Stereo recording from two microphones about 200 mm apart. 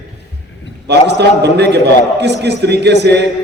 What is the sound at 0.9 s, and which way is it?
A man's voice, 60° right (ahead or behind).